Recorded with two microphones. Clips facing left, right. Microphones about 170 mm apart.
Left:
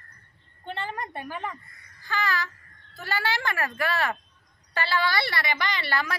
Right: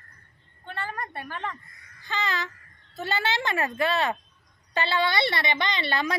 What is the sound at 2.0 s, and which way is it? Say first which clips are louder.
A woman's voice: left 1 dB; 20° right (ahead or behind).